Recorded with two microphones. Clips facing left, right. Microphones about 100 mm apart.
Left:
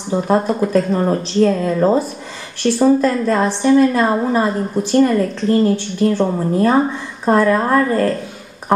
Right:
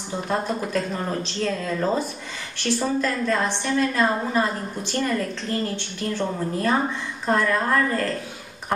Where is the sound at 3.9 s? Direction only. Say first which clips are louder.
Left 6 dB; 35° left (ahead or behind).